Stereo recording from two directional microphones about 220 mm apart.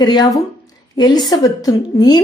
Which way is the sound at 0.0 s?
20° left (ahead or behind).